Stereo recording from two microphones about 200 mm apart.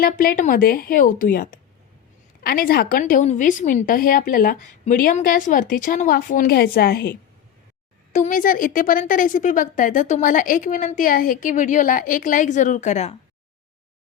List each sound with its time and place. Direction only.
0.0 s a woman's voice: 45° left (ahead or behind)
8.1 s a woman's voice: 40° left (ahead or behind)